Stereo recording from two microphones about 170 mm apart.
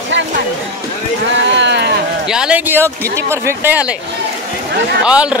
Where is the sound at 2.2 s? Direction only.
5° right (ahead or behind).